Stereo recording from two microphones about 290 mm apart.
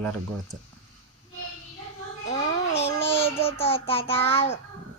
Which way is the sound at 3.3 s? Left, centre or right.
Centre.